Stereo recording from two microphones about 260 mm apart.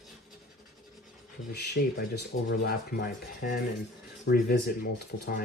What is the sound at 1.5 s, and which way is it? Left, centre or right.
Speech, left.